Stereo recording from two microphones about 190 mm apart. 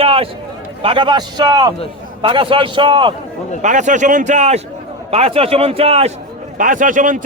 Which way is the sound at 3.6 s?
40° right (ahead or behind).